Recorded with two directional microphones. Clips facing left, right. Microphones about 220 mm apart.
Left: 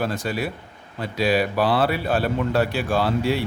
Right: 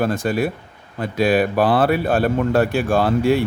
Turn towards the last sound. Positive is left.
turn(degrees=-50)  # may be behind; listen again after turning